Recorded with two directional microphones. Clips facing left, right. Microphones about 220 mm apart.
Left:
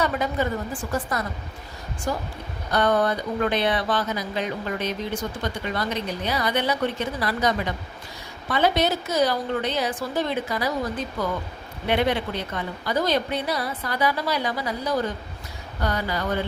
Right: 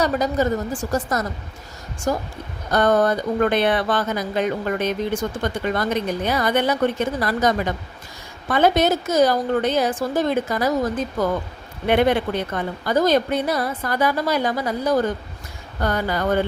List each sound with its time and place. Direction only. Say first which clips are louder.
0.0 s a woman's voice: right 4 dB; 40° right (ahead or behind)